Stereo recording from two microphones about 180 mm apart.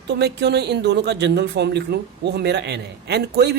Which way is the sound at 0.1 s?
70° right (ahead or behind).